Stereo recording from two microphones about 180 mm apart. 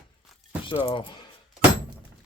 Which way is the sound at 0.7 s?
30° left (ahead or behind).